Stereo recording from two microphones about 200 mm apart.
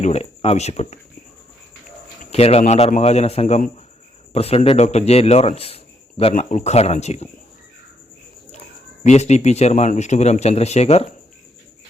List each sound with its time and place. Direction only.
0.0 s speech: 30° left (ahead or behind)
2.3 s a man's voice: 30° left (ahead or behind)
9.0 s a man's voice: 35° left (ahead or behind)